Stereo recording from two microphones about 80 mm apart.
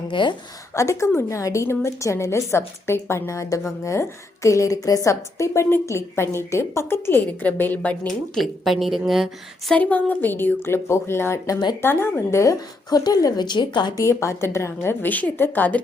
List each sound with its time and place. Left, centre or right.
0.1 s a woman's voice: left
0.7 s a woman's voice: left; by 7.9 s centre
8.0 s a woman's voice: centre
9.7 s a woman's voice: centre; by 12.5 s left
12.5 s a woman's voice: left
13.9 s a woman's voice: left